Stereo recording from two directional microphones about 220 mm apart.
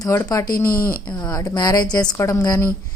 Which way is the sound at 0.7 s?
40° left (ahead or behind).